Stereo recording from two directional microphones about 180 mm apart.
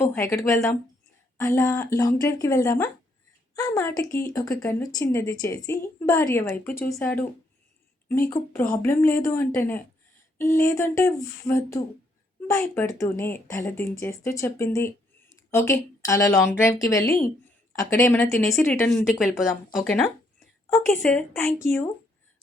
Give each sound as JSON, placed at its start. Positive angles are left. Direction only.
{"t": 0.0, "sound": "speech", "side_deg": 10}
{"t": 8.3, "sound": "a woman's voice", "side_deg": 20}
{"t": 18.3, "sound": "speech", "side_deg": 0}
{"t": 20.7, "sound": "speech", "side_deg": 15}